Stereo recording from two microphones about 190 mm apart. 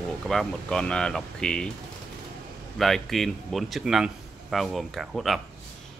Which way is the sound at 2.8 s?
Centre (ahead or behind).